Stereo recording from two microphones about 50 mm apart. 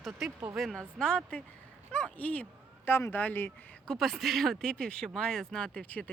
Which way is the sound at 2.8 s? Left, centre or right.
Left.